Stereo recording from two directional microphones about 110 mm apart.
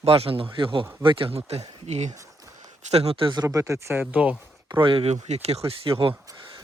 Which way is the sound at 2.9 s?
65° right (ahead or behind).